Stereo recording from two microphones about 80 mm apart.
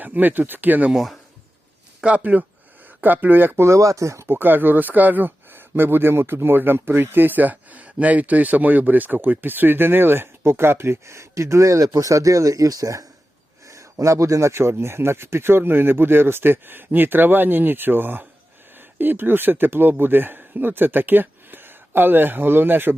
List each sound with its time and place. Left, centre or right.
0.0 s speech: right
0.9 s speech: centre
2.0 s speech: centre